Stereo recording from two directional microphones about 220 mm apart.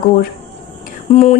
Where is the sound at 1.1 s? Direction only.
30° left (ahead or behind).